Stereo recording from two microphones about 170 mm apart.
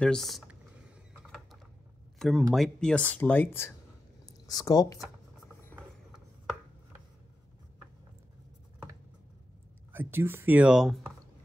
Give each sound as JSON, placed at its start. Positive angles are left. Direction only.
{"t": 0.0, "sound": "speech", "side_deg": 5}
{"t": 2.1, "sound": "a sound", "side_deg": 0}
{"t": 2.5, "sound": "speech", "side_deg": 5}
{"t": 9.9, "sound": "speech", "side_deg": -15}